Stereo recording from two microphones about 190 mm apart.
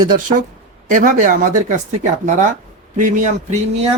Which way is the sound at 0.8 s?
45° right (ahead or behind).